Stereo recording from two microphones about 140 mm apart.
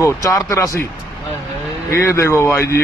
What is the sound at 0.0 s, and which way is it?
Speech, 20° left (ahead or behind).